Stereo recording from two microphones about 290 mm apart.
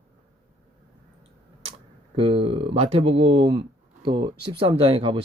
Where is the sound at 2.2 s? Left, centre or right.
Centre.